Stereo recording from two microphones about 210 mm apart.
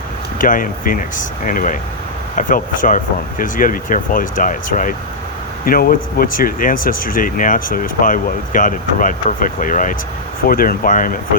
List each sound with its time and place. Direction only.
0.3 s speech: 40° left (ahead or behind)